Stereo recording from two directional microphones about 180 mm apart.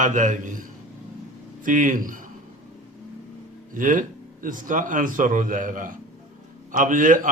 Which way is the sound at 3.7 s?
45° right (ahead or behind).